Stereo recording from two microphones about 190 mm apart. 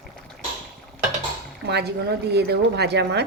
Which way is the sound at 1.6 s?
60° right (ahead or behind).